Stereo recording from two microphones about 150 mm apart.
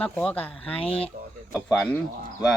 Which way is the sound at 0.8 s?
40° left (ahead or behind).